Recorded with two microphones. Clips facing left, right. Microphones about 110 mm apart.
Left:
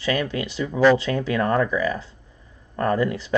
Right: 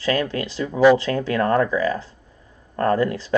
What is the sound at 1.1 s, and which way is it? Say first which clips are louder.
Speech: right 2 dB; 15° left (ahead or behind).